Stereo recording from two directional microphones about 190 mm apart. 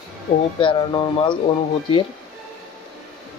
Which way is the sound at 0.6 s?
25° left (ahead or behind).